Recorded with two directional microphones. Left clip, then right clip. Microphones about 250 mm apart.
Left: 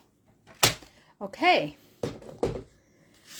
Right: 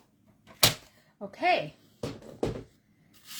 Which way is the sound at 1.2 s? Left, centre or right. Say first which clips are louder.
Left 4 dB; left.